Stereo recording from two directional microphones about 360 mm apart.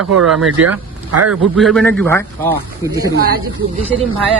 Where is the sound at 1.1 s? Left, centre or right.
Right.